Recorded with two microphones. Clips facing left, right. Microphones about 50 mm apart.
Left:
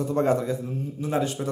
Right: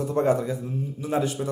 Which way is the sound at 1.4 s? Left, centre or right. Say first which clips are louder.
Even; centre.